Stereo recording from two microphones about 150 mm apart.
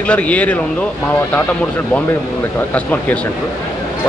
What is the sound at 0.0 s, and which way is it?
Speech, 10° left (ahead or behind).